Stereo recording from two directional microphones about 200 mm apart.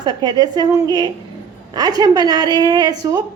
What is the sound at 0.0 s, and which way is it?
A woman's voice, 20° right (ahead or behind).